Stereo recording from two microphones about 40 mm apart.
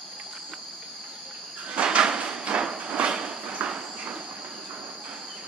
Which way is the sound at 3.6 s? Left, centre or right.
Right.